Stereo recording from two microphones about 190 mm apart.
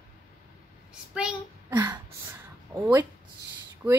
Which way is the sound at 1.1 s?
5° right (ahead or behind).